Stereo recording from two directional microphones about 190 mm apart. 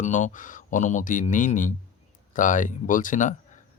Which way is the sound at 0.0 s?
40° left (ahead or behind).